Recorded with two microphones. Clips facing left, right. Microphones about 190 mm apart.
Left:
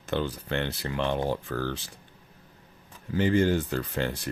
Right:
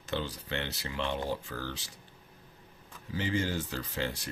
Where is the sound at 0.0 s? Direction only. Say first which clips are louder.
Left 6 dB; 55° left (ahead or behind).